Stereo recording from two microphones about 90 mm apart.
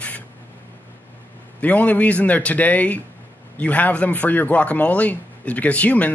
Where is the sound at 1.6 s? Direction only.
15° left (ahead or behind).